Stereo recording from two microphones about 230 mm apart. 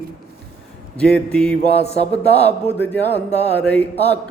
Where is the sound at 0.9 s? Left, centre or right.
Centre.